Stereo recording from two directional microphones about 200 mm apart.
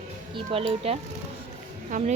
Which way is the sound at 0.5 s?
30° right (ahead or behind).